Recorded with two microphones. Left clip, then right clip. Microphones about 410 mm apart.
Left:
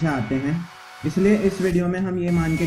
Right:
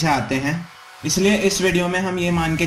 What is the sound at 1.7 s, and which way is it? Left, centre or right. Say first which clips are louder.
Speech: right 4 dB; right.